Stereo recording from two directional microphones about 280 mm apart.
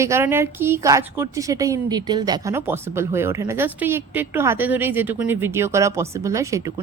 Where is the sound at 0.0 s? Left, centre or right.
Centre.